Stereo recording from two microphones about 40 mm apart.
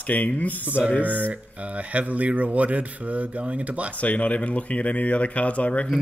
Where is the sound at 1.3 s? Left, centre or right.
Right.